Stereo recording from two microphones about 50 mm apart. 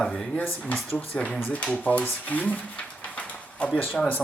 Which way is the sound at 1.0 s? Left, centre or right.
Left.